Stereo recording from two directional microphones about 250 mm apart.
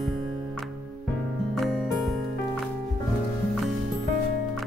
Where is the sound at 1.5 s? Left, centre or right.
Centre.